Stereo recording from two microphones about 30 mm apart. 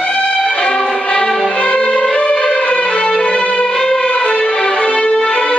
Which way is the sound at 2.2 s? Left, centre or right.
Left.